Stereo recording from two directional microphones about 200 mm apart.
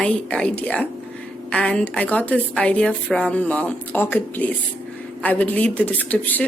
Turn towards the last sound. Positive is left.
turn(degrees=10)  # may be behind; listen again after turning